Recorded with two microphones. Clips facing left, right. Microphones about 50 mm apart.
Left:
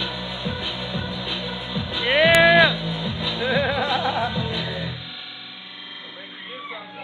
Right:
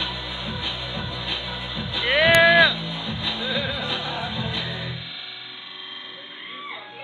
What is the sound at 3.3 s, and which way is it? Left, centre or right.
Music, left.